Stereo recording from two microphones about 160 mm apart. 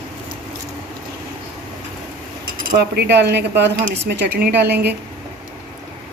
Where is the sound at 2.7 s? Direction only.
90° right.